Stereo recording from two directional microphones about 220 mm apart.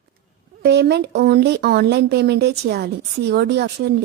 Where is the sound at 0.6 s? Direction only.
50° right (ahead or behind).